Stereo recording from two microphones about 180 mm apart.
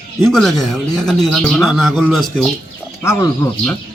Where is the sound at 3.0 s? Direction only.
15° left (ahead or behind).